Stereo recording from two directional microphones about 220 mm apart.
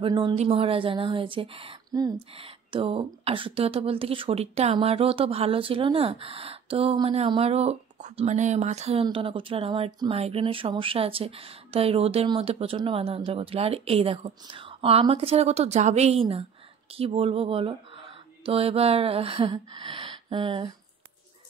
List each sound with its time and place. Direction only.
0.0 s a woman's voice: 20° right (ahead or behind)